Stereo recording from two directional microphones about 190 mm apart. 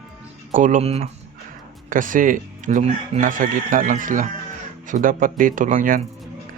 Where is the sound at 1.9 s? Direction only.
45° right (ahead or behind).